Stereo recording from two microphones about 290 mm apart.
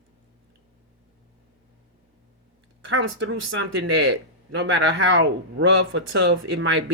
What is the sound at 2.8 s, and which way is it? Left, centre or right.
Speech, right.